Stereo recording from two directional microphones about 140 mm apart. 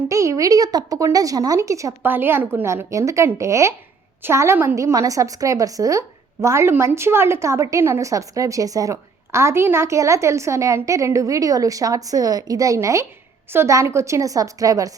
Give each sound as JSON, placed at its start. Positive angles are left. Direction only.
{"t": 0.1, "sound": "a woman's voice", "side_deg": -20}